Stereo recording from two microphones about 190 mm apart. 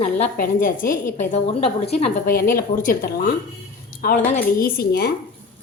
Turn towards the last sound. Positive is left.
turn(degrees=55)  # may be behind; listen again after turning